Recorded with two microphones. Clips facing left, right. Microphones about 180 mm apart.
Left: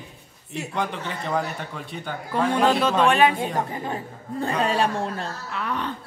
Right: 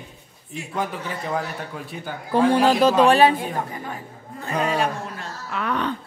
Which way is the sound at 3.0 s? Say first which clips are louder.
Right 2 dB; 35° right (ahead or behind).